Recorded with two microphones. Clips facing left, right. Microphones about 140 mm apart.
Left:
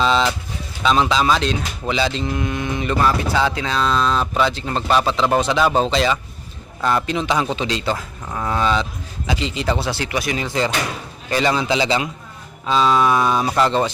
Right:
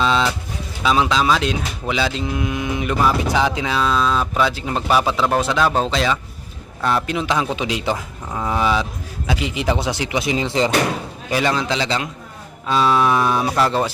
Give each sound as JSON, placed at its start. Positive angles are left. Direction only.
{"t": 0.0, "sound": "speech", "side_deg": 0}
{"t": 11.3, "sound": "speech", "side_deg": 0}